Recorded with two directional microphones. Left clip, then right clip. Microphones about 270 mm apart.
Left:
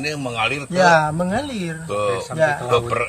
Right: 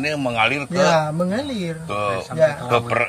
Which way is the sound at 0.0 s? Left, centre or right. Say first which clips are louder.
Right 3 dB; centre.